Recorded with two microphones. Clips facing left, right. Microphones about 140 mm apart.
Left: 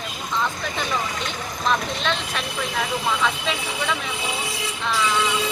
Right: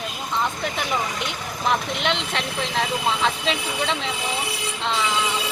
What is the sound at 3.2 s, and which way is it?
Speech, 25° right (ahead or behind).